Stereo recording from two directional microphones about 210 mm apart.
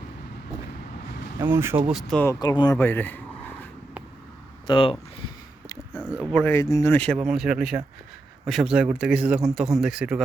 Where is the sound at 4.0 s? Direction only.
5° right (ahead or behind).